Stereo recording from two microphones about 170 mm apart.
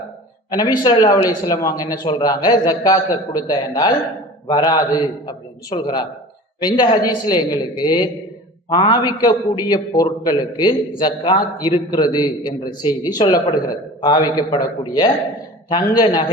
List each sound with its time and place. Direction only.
0.5 s a man's voice: 25° left (ahead or behind)